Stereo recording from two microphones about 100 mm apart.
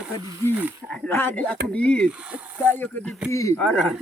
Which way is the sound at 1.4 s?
10° left (ahead or behind).